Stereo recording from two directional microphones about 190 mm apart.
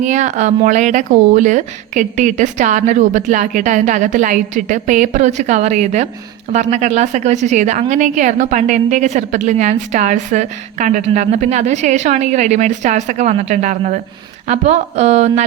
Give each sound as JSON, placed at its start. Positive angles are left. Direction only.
{"t": 0.0, "sound": "a woman's voice", "side_deg": -40}